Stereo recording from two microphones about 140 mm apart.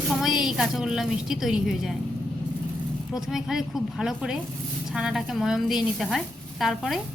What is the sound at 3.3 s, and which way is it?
A woman's voice, 5° right (ahead or behind).